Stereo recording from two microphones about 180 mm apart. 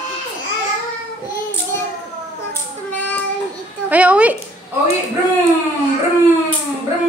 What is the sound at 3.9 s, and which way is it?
Speech, 10° right (ahead or behind).